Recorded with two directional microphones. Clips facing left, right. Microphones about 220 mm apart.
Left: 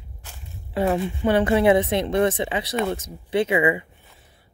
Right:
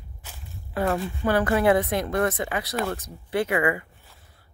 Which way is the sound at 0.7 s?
20° left (ahead or behind).